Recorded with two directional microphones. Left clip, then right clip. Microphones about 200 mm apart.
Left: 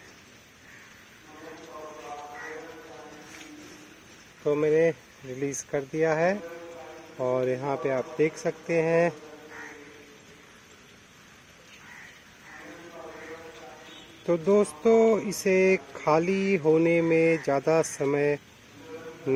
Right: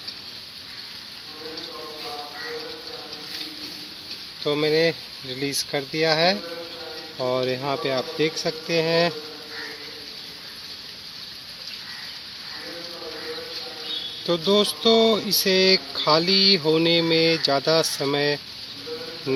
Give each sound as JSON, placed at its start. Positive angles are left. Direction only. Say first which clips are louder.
{"t": 4.4, "sound": "speech", "louder": "right 2 dB", "side_deg": 15}
{"t": 14.3, "sound": "speech", "louder": "right 2 dB", "side_deg": 20}